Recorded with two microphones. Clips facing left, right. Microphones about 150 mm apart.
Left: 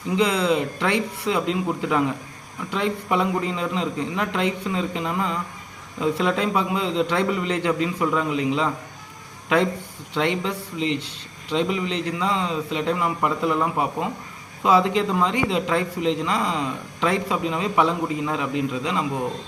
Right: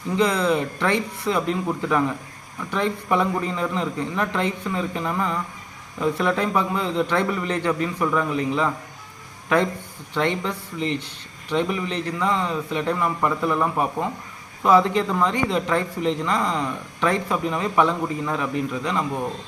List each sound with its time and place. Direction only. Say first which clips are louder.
0.2 s speech: even; 15° left (ahead or behind)
10.2 s speech: even; 15° left (ahead or behind)